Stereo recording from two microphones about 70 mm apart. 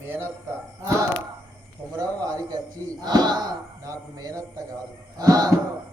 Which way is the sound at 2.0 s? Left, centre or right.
Right.